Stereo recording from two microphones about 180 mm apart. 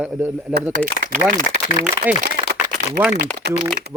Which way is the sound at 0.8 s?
50° right (ahead or behind).